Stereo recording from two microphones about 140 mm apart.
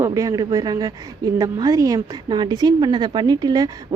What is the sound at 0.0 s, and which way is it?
A woman's voice, 25° right (ahead or behind).